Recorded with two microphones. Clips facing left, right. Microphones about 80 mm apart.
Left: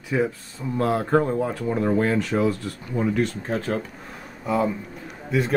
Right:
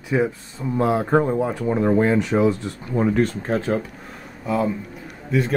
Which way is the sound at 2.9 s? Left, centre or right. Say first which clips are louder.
Right 4 dB; right.